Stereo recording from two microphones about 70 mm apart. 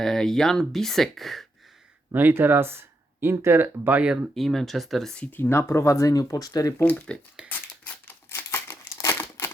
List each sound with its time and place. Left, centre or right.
0.0 s speech: centre
2.1 s speech: right
3.8 s speech: right
4.4 s speech: centre
5.4 s speech: left
6.9 s speech: centre
7.4 s crumpling: centre
8.3 s crumpling: left